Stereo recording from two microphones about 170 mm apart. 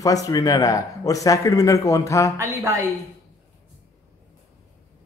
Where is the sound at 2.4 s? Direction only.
15° right (ahead or behind).